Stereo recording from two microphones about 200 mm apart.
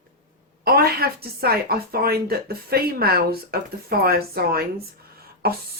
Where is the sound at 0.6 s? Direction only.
50° right (ahead or behind).